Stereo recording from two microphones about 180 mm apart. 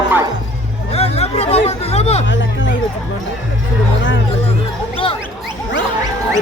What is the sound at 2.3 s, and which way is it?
Speech, 90° left.